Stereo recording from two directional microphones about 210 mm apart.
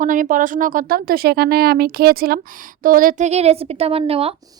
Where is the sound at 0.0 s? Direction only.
40° right (ahead or behind).